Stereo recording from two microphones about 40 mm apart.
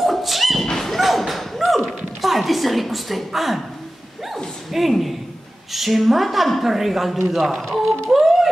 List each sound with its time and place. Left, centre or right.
0.0 s a sound: centre
0.7 s thump: centre
2.2 s a woman's voice: centre
4.7 s a woman's voice: centre
8.1 s music: centre